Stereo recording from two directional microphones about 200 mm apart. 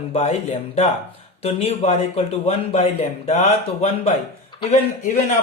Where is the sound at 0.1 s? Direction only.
30° left (ahead or behind).